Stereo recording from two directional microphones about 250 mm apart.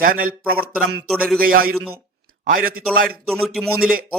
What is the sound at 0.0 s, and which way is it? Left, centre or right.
Speech, right.